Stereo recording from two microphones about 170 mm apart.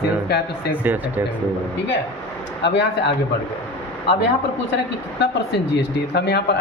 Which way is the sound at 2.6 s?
90° left.